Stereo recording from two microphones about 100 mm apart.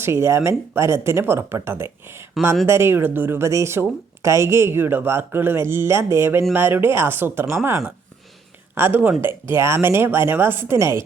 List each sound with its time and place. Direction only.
0.0 s speech: 25° right (ahead or behind)